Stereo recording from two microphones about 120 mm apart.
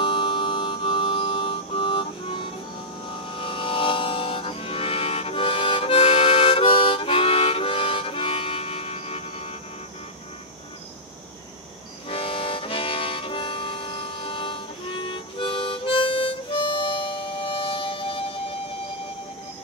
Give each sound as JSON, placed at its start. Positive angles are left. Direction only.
{"t": 0.0, "sound": "music", "side_deg": 45}
{"t": 12.1, "sound": "harmonica", "side_deg": 50}